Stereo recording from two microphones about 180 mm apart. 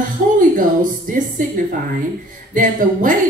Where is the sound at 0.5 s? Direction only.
45° right (ahead or behind).